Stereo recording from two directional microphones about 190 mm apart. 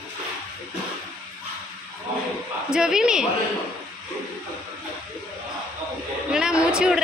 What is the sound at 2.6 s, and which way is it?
Speech, 5° right (ahead or behind).